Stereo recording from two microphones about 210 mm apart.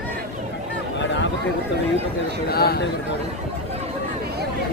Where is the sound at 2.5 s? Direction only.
45° left (ahead or behind).